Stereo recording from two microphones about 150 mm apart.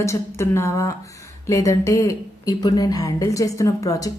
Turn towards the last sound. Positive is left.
turn(degrees=20)  # may be behind; listen again after turning